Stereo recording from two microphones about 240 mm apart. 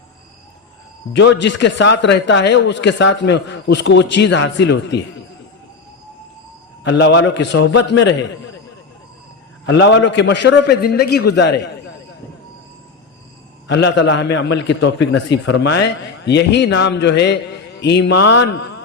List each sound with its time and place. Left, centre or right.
1.1 s a man's voice: left
6.8 s a man's voice: left
9.6 s a man's voice: left
13.7 s a man's voice: left